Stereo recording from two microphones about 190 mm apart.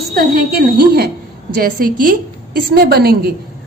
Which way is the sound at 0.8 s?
55° right (ahead or behind).